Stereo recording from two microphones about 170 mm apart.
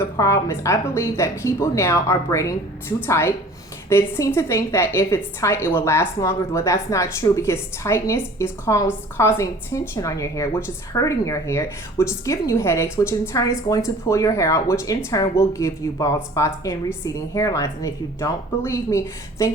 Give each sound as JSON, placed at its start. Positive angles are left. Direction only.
{"t": 0.0, "sound": "a woman's voice", "side_deg": 15}